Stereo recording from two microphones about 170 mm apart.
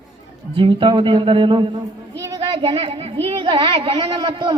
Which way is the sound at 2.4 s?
30° right (ahead or behind).